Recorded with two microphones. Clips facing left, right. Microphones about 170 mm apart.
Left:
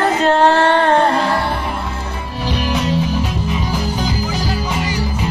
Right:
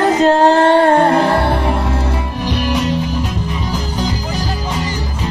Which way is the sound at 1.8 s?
80° right.